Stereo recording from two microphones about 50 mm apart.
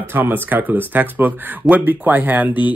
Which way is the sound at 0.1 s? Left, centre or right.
Right.